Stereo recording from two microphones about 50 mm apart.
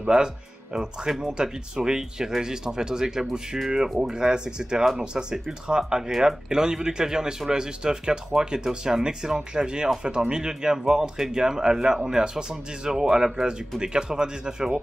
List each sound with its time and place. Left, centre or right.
0.0 s speech: centre
1.3 s speech: centre
4.0 s speech: centre